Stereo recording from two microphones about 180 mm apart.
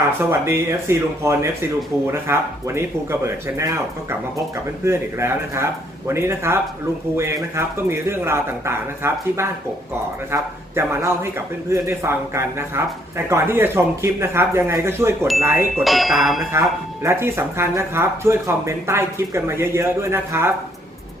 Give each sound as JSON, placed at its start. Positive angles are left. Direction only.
{"t": 0.2, "sound": "a man's voice", "side_deg": -15}
{"t": 4.8, "sound": "a man's voice", "side_deg": -15}
{"t": 15.8, "sound": "speech", "side_deg": 0}
{"t": 16.5, "sound": "a man's voice", "side_deg": -15}